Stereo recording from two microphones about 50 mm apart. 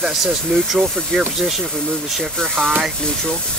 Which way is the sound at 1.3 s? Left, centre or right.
Centre.